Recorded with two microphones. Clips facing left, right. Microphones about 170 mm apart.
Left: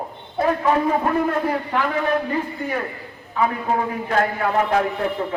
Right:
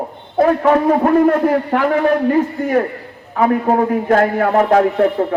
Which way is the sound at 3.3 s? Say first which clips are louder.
Right 7 dB; 50° right (ahead or behind).